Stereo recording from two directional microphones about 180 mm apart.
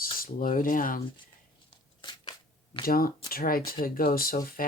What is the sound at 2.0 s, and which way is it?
Shuffling cards, 25° left (ahead or behind).